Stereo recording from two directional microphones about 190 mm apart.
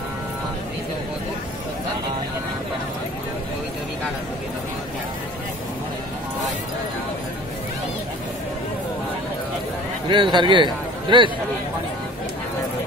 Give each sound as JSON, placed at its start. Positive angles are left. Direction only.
{"t": 10.0, "sound": "a man's voice", "side_deg": -25}